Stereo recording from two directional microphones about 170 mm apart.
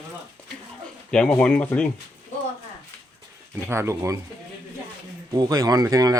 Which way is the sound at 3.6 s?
15° right (ahead or behind).